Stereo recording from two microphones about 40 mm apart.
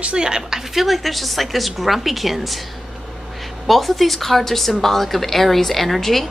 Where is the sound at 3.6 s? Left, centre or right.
Centre.